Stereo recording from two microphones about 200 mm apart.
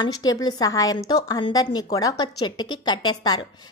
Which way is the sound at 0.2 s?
20° left (ahead or behind).